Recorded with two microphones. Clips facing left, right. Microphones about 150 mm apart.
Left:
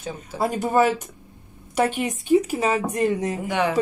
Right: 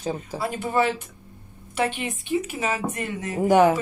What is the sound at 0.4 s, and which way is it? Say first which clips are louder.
A woman's voice: left 5 dB; 40° left (ahead or behind).